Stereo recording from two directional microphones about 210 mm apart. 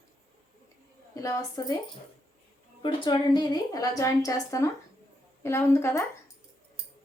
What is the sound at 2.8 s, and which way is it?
A woman's voice, 20° left (ahead or behind).